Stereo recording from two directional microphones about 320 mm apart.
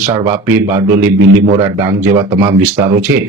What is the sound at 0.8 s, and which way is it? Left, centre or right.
Speech, right.